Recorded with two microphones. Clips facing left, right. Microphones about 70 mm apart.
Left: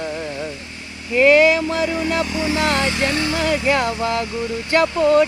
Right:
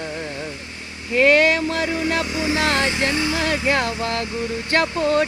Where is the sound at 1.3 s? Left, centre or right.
Right.